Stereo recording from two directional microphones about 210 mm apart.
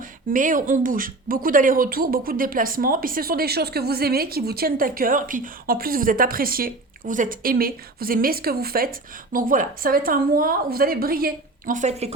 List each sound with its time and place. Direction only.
0.0 s speech: 40° right (ahead or behind)